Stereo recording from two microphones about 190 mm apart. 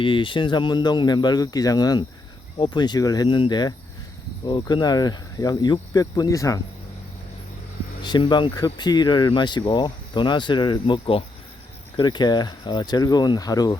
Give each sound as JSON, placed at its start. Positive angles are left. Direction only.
{"t": 0.0, "sound": "speech", "side_deg": 25}
{"t": 8.0, "sound": "speech", "side_deg": 25}